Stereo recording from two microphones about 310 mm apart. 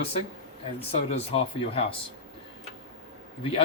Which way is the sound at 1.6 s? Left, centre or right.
Centre.